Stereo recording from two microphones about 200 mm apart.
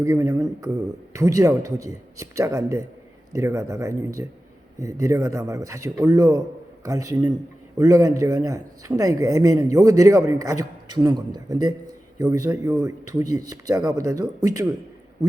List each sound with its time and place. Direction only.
0.0 s a man's voice: 15° right (ahead or behind)